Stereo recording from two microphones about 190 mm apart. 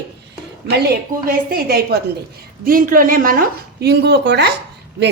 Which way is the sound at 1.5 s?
55° right (ahead or behind).